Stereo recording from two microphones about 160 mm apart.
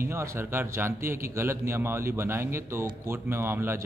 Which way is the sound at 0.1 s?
15° right (ahead or behind).